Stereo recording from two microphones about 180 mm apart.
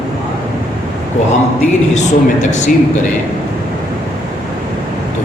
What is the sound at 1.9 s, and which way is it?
Speech, 40° left (ahead or behind).